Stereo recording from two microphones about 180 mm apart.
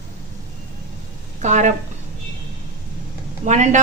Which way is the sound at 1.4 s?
40° right (ahead or behind).